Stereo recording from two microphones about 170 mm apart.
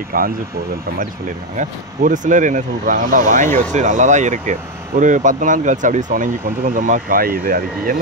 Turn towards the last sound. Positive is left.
turn(degrees=-60)  # may be behind; listen again after turning